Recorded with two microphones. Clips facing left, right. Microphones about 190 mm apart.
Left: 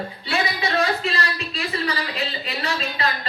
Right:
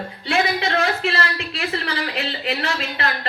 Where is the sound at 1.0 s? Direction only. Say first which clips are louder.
Right 2 dB; 70° right (ahead or behind).